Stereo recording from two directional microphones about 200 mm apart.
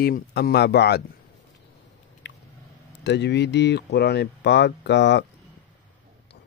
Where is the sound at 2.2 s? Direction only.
60° left (ahead or behind).